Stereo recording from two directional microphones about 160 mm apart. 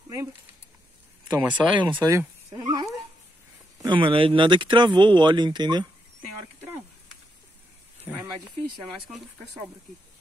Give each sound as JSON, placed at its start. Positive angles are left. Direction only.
{"t": 1.4, "sound": "speech", "side_deg": -10}
{"t": 2.0, "sound": "speech", "side_deg": -20}
{"t": 3.8, "sound": "speech", "side_deg": -30}
{"t": 8.1, "sound": "speech", "side_deg": -10}